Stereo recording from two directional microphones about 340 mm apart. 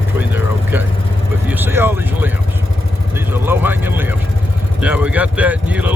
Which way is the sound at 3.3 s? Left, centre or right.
Centre.